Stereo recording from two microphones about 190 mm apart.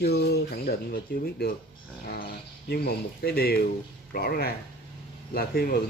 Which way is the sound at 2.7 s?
55° left (ahead or behind).